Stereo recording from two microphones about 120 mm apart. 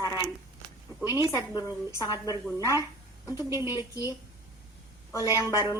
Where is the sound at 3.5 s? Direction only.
25° right (ahead or behind).